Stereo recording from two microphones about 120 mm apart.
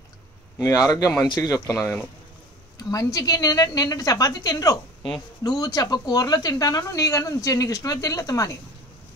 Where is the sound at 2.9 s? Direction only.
30° left (ahead or behind).